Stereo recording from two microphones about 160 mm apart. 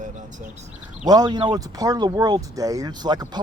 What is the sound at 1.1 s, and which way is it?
Speech, 25° right (ahead or behind).